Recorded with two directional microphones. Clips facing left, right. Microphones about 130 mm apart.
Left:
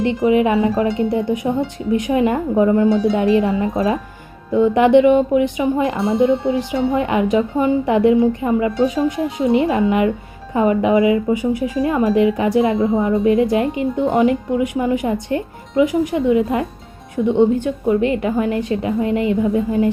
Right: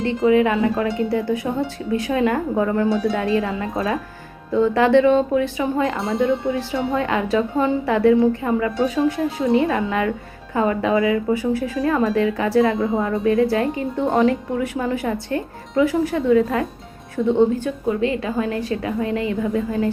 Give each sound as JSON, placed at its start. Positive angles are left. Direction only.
{"t": 0.0, "sound": "speech", "side_deg": 20}
{"t": 2.9, "sound": "speech", "side_deg": 0}
{"t": 3.2, "sound": "speech", "side_deg": 20}
{"t": 6.0, "sound": "speech", "side_deg": 0}
{"t": 6.5, "sound": "speech", "side_deg": 15}
{"t": 12.7, "sound": "speech", "side_deg": 0}
{"t": 13.2, "sound": "speech", "side_deg": 20}